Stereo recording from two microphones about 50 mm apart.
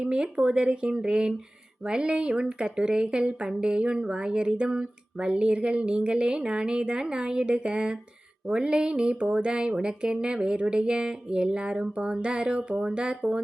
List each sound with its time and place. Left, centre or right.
0.0 s speech: centre